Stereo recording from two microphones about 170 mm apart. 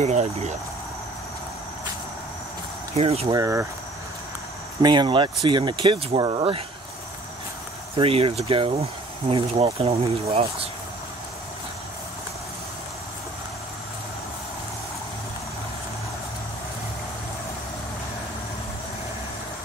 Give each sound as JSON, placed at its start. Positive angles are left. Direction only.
{"t": 0.0, "sound": "speech", "side_deg": -40}
{"t": 3.0, "sound": "speech", "side_deg": -35}
{"t": 3.3, "sound": "speech", "side_deg": -20}
{"t": 4.8, "sound": "speech", "side_deg": -25}
{"t": 7.9, "sound": "speech", "side_deg": -35}